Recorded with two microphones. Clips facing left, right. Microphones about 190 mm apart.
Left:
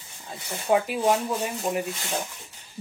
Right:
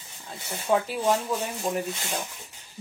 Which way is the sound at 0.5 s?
20° left (ahead or behind).